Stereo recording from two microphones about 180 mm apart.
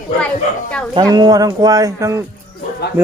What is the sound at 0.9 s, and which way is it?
Speech, 20° right (ahead or behind).